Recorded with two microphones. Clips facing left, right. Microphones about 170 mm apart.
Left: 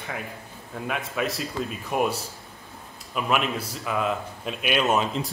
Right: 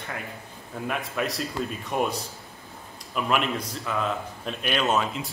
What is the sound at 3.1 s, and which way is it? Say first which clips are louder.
A man's voice: even; 5° left (ahead or behind).